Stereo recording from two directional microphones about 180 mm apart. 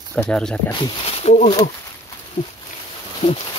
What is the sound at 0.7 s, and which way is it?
Speech, 30° left (ahead or behind).